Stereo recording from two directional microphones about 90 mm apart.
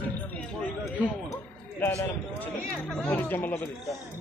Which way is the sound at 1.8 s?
30° left (ahead or behind).